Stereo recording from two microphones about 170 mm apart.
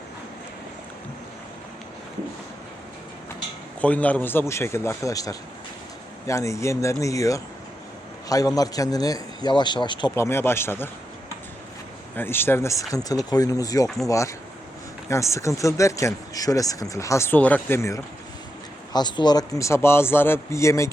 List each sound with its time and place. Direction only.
3.8 s a man's voice: 10° left (ahead or behind); by 10.2 s 25° left (ahead or behind)
10.2 s speech: 15° left (ahead or behind)
12.1 s a man's voice: 15° left (ahead or behind)